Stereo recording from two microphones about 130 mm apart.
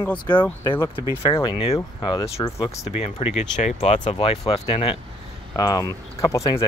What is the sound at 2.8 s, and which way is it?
Speech, 50° left (ahead or behind).